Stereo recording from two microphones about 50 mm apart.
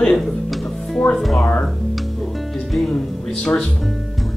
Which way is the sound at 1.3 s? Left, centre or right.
Left.